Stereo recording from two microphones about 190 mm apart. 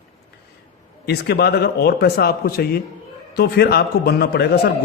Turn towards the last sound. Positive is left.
turn(degrees=60)  # may be behind; listen again after turning